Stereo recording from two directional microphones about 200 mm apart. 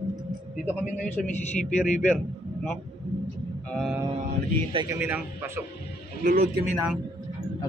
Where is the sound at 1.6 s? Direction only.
35° left (ahead or behind).